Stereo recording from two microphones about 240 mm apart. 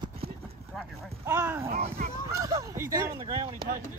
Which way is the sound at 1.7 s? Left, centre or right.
Right.